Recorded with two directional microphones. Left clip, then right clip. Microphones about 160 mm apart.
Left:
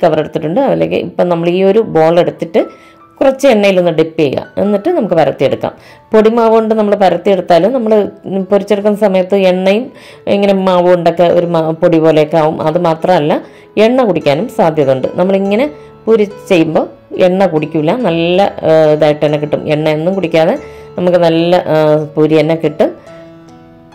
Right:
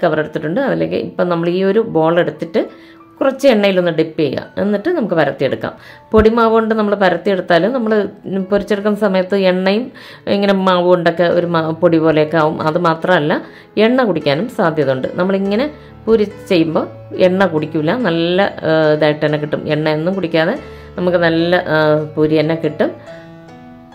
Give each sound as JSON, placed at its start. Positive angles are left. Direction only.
{"t": 0.0, "sound": "a man's voice", "side_deg": 15}